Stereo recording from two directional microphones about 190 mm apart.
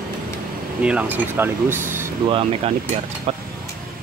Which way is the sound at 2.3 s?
30° right (ahead or behind).